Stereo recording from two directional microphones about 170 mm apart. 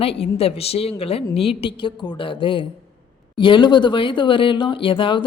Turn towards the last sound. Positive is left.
turn(degrees=30)  # may be behind; listen again after turning